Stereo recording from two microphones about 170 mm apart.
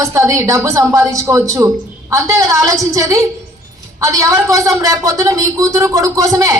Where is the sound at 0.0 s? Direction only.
15° right (ahead or behind).